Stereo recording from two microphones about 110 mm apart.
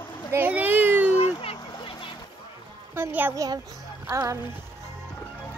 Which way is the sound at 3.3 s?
35° right (ahead or behind).